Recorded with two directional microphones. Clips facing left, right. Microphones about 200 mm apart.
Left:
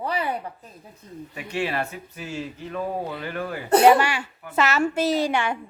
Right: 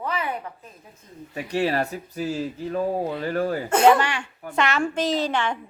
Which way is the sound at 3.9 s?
10° left (ahead or behind).